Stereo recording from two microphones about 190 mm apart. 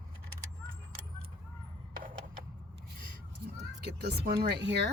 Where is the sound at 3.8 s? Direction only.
60° right (ahead or behind).